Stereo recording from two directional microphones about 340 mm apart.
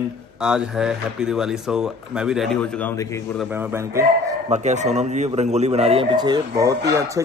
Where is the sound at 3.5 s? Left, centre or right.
Centre.